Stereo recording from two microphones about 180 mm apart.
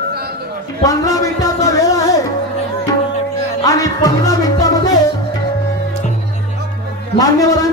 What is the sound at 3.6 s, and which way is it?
Music, 20° left (ahead or behind).